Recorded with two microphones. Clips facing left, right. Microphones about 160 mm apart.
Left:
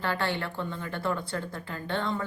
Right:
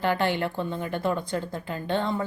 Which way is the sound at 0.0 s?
20° right (ahead or behind).